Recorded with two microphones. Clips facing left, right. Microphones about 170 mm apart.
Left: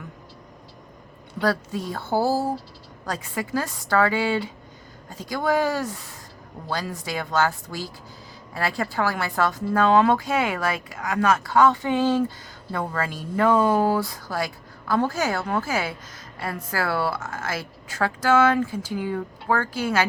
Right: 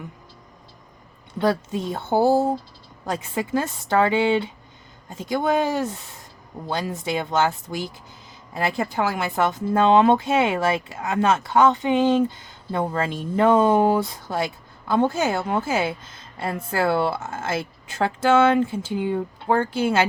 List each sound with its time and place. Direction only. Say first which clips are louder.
1.4 s speech: right 2 dB; 20° right (ahead or behind)